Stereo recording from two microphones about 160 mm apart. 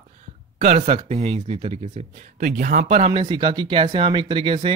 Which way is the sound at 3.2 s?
30° right (ahead or behind).